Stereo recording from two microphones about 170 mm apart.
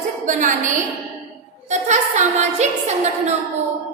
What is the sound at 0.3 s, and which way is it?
A woman's voice, 50° right (ahead or behind).